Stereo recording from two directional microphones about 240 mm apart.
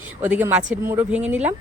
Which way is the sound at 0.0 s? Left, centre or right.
Centre.